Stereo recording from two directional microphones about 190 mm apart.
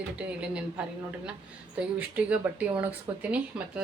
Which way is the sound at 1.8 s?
5° right (ahead or behind).